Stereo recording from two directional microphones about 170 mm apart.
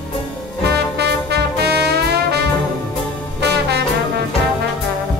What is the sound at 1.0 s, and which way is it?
Music, 75° right (ahead or behind).